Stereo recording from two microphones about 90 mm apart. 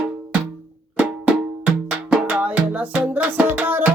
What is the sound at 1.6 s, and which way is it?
Music, 15° right (ahead or behind).